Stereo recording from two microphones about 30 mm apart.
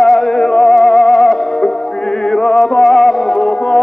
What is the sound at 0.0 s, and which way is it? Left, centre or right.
Music, centre.